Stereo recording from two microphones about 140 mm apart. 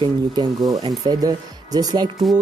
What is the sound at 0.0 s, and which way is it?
Speech, 30° right (ahead or behind).